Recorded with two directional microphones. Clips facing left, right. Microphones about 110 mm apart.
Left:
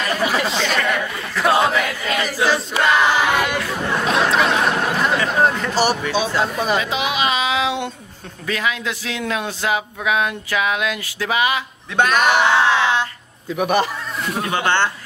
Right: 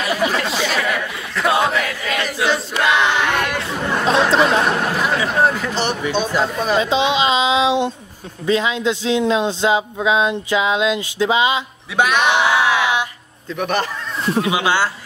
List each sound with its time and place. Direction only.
0.0 s chatter: 5° right (ahead or behind)
0.3 s chatter: 5° left (ahead or behind)
0.6 s a sound: 5° right (ahead or behind)
4.1 s chatter: 30° right (ahead or behind)
5.0 s speech: 5° right (ahead or behind)
6.0 s speech: 15° right (ahead or behind)
6.4 s speech: 5° left (ahead or behind)
6.8 s speech: 25° right (ahead or behind)
12.0 s a sound: centre (ahead or behind)
13.6 s speech: 10° left (ahead or behind)
14.4 s speech: 10° right (ahead or behind)